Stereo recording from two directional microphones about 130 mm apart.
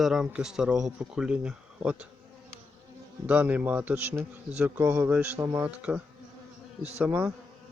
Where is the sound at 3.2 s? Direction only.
10° right (ahead or behind).